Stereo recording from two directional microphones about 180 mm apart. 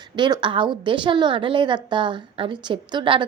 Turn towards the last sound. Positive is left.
turn(degrees=-25)  # may be behind; listen again after turning